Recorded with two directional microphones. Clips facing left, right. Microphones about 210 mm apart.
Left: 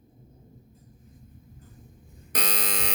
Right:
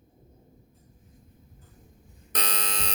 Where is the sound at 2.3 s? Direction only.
10° left (ahead or behind).